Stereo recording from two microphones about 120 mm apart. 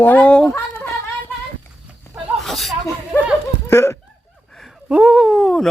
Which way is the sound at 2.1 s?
20° left (ahead or behind).